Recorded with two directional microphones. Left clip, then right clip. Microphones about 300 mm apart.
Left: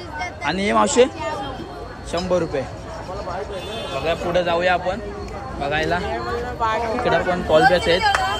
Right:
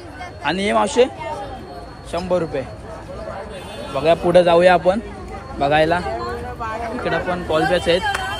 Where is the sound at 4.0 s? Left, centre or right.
Centre.